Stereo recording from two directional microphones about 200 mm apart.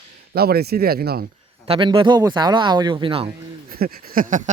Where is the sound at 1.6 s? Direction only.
25° right (ahead or behind).